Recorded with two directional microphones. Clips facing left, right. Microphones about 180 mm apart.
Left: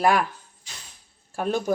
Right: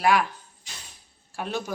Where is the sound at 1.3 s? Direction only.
45° left (ahead or behind).